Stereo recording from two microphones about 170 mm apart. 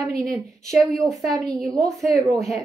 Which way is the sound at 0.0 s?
Centre (ahead or behind).